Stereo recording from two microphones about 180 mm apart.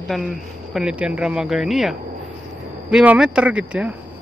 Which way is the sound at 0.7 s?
5° right (ahead or behind).